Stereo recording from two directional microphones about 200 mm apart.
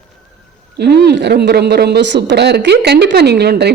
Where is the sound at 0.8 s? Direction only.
55° right (ahead or behind).